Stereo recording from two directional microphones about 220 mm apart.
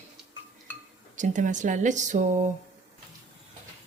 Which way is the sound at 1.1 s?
35° right (ahead or behind).